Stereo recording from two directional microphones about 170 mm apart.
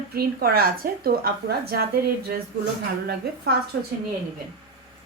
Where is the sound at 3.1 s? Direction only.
70° right (ahead or behind).